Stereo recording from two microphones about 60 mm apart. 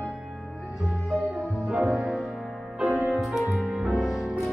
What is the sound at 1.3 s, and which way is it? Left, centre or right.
Music, centre.